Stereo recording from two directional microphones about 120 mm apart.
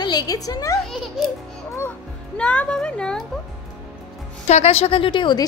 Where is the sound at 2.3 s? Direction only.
10° left (ahead or behind).